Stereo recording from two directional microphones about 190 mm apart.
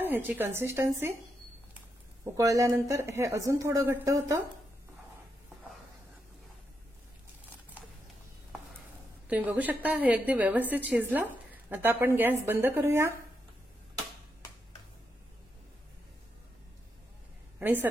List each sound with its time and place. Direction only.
0.0 s a woman's voice: 10° right (ahead or behind)
2.3 s a woman's voice: 15° right (ahead or behind)
9.3 s a woman's voice: 10° right (ahead or behind)